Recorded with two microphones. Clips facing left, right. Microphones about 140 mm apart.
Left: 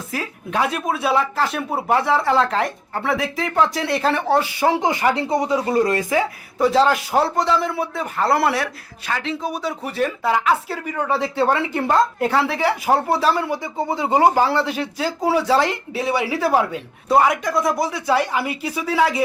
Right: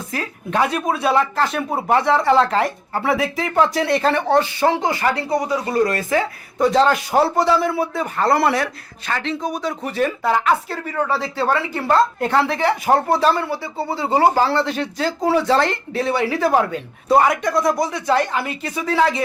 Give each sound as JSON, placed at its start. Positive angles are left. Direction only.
{"t": 0.1, "sound": "speech", "side_deg": 5}
{"t": 10.9, "sound": "speech", "side_deg": 20}
{"t": 12.2, "sound": "speech", "side_deg": 5}